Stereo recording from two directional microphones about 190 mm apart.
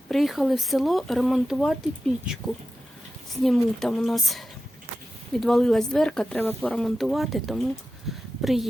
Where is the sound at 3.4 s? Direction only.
Centre (ahead or behind).